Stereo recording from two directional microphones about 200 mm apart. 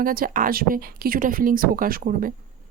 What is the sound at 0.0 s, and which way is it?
Speech, 45° right (ahead or behind).